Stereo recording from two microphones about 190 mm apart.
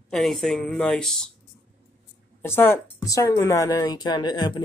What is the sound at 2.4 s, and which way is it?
Speech, 15° left (ahead or behind).